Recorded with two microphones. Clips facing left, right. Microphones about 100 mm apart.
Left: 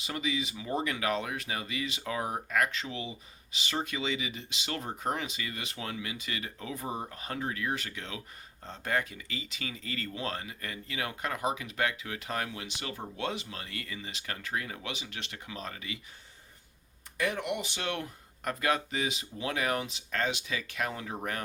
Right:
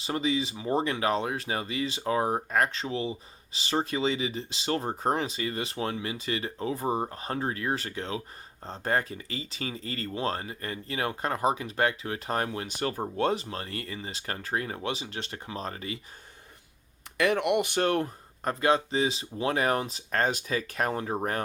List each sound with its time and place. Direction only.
0.0 s speech: 35° right (ahead or behind)
17.2 s speech: 75° right (ahead or behind); by 18.5 s 40° right (ahead or behind)
18.6 s speech: 30° right (ahead or behind)